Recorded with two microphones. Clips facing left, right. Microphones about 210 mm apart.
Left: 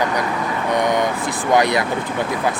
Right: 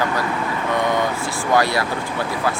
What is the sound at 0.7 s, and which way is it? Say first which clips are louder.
Speech: left 2 dB; 15° left (ahead or behind).